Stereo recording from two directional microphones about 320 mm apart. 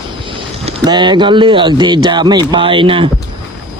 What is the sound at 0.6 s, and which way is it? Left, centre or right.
Speech, centre.